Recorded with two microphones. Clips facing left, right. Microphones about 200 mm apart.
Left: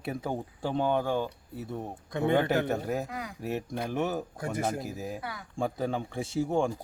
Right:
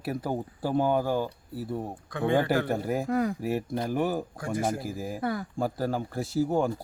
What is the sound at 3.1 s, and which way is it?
Speech, 50° right (ahead or behind).